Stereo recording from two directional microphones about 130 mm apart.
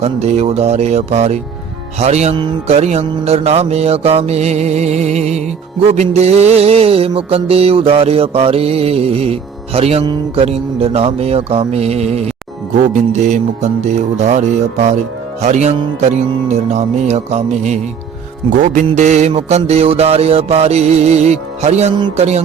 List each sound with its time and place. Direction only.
0.0 s mantra: 55° right (ahead or behind)
2.3 s speech: 40° right (ahead or behind)
2.7 s mantra: 55° right (ahead or behind)
5.9 s music: 55° right (ahead or behind)
13.2 s mantra: 65° right (ahead or behind)
18.6 s music: 80° right
18.9 s mantra: 65° right (ahead or behind)